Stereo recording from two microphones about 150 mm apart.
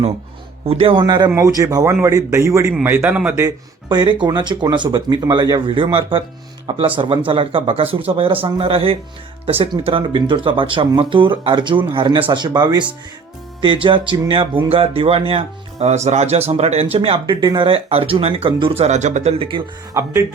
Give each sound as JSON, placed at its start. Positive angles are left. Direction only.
{"t": 0.6, "sound": "speech", "side_deg": -40}
{"t": 1.0, "sound": "speech", "side_deg": -30}
{"t": 3.8, "sound": "speech", "side_deg": -30}
{"t": 19.9, "sound": "speech", "side_deg": -15}